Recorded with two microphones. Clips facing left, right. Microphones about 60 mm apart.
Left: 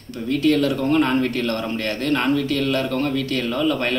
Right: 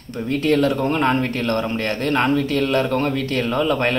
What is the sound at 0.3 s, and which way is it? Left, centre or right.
Speech, right.